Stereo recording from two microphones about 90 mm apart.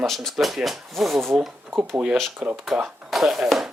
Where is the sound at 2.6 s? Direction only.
5° right (ahead or behind).